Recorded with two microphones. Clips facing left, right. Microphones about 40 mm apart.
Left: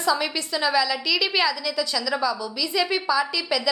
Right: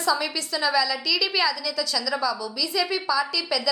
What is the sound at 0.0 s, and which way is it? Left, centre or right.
A woman's voice, left.